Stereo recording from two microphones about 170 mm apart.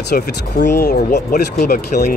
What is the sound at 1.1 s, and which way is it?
Speech, 45° left (ahead or behind).